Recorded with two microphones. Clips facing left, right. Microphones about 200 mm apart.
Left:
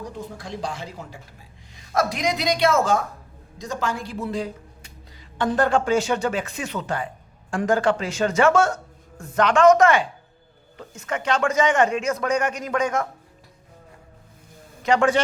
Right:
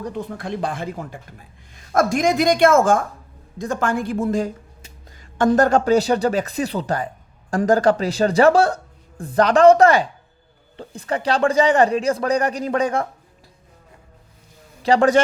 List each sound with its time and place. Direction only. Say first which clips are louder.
0.0 s a woman's voice: right 6 dB; 60° right (ahead or behind); by 13.1 s 35° right (ahead or behind)
14.8 s a man's voice: right 4 dB; 35° right (ahead or behind)